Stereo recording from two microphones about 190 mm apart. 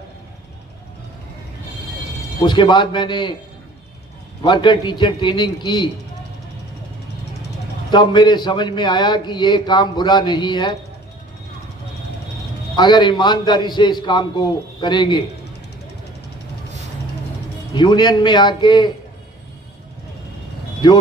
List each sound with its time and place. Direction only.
2.4 s a man's voice: 25° left (ahead or behind)
4.5 s a man's voice: 25° left (ahead or behind)
7.9 s a man's voice: 25° left (ahead or behind)
12.7 s a man's voice: 25° left (ahead or behind)
17.7 s a man's voice: 25° left (ahead or behind)
20.8 s a man's voice: 25° left (ahead or behind)